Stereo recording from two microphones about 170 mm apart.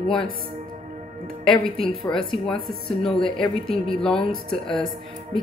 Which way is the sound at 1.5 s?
30° left (ahead or behind).